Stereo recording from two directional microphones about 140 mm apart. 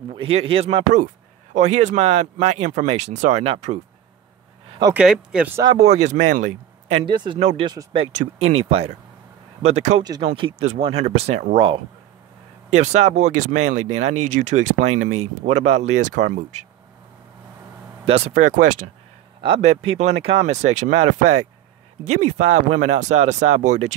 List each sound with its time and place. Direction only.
0.1 s speech: 40° right (ahead or behind)
4.9 s speech: 5° right (ahead or behind)
5.8 s speech: 55° right (ahead or behind)
7.1 s speech: 35° right (ahead or behind)
7.3 s speech: 55° right (ahead or behind)
7.6 s speech: 35° right (ahead or behind)
8.1 s speech: 55° right (ahead or behind)
11.5 s speech: 40° right (ahead or behind)
12.7 s speech: 55° right (ahead or behind)
18.0 s speech: 45° right (ahead or behind); by 18.9 s 65° right (ahead or behind)
19.7 s speech: 55° right (ahead or behind)